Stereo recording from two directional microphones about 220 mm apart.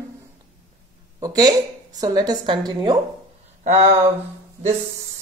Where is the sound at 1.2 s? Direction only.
20° right (ahead or behind).